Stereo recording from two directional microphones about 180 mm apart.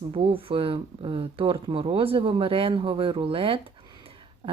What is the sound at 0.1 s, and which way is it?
Speech, 30° right (ahead or behind).